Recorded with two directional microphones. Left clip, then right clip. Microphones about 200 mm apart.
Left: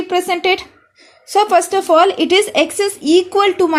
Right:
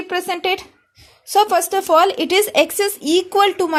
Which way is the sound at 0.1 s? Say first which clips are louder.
Left 5 dB; 25° right (ahead or behind).